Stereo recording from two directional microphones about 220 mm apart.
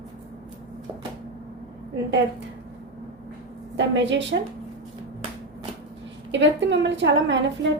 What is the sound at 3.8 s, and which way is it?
Speech, 55° right (ahead or behind).